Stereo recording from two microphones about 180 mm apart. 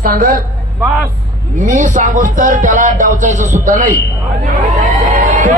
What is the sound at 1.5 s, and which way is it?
Speech, 40° right (ahead or behind).